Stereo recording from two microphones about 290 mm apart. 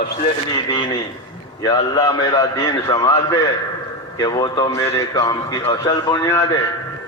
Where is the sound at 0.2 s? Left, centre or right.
Centre.